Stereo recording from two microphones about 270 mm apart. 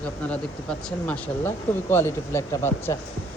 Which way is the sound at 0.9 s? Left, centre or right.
Centre.